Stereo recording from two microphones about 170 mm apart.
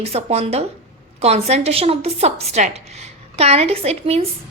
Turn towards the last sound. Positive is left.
turn(degrees=-35)  # may be behind; listen again after turning